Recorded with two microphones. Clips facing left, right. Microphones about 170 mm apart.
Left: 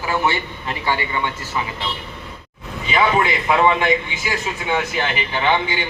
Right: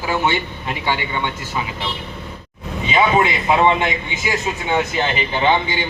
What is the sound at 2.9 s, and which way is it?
A man's voice, 20° right (ahead or behind).